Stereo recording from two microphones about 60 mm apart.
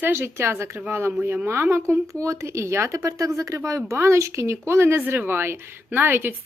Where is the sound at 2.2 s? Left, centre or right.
Right.